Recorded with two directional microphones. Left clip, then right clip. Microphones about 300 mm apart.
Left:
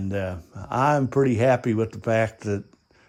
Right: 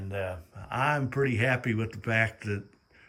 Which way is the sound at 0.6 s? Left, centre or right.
Left.